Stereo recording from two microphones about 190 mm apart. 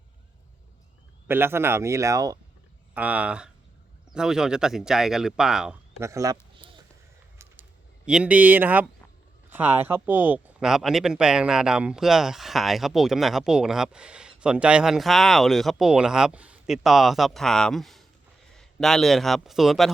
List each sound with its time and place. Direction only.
1.3 s speech: 10° right (ahead or behind)
2.9 s speech: 10° right (ahead or behind)
6.0 s speech: 15° right (ahead or behind)
6.6 s a sound: 25° right (ahead or behind)
8.0 s a man's voice: 5° right (ahead or behind)